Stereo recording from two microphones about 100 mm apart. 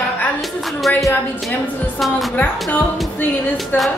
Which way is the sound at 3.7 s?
20° left (ahead or behind).